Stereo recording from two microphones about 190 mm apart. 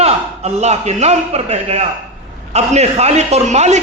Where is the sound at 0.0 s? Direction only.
35° right (ahead or behind).